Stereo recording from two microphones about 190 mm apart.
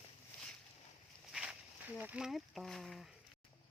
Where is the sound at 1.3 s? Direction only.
Centre (ahead or behind).